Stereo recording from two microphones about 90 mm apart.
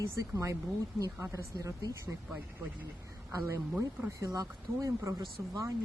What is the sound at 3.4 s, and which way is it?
Speech, 35° right (ahead or behind).